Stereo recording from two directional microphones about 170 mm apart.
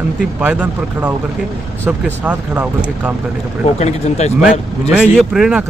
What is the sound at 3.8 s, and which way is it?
Speech, 40° left (ahead or behind).